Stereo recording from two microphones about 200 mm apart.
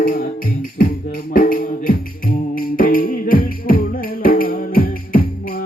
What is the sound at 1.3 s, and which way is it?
Music, 45° left (ahead or behind).